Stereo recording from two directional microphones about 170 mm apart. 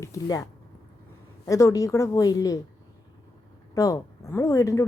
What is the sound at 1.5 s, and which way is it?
A woman's voice, 20° left (ahead or behind).